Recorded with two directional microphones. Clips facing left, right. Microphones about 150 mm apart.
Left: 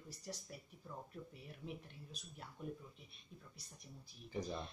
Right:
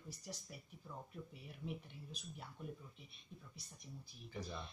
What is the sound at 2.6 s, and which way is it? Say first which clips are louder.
Speech: left 3 dB; centre (ahead or behind).